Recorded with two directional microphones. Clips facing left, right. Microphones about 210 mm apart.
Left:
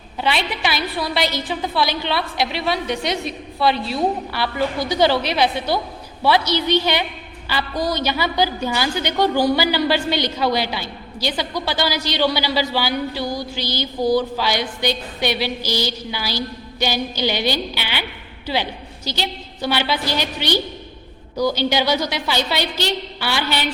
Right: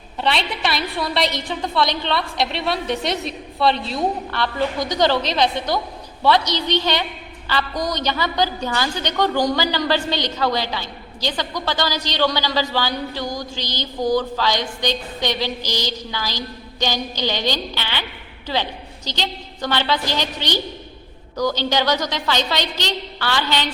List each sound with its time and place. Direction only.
0.2 s a woman's voice: centre (ahead or behind)